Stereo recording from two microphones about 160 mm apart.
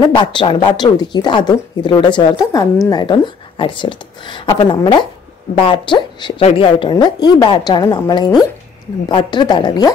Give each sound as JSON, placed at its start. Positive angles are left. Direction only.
{"t": 0.0, "sound": "speech", "side_deg": 30}